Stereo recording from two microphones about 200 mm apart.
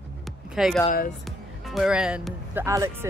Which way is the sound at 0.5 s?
Centre (ahead or behind).